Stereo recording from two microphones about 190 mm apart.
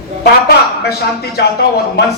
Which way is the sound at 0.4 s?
55° left (ahead or behind).